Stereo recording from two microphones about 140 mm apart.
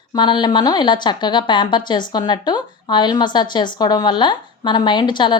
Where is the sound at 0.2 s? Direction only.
30° left (ahead or behind).